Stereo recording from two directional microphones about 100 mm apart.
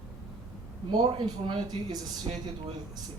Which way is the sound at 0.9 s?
60° right (ahead or behind).